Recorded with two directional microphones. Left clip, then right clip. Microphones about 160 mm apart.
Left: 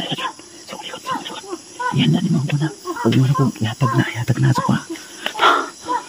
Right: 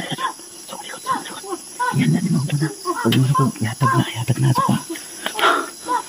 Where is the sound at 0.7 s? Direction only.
30° left (ahead or behind).